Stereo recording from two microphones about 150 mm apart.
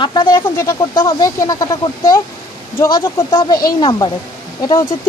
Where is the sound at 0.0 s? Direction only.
30° left (ahead or behind).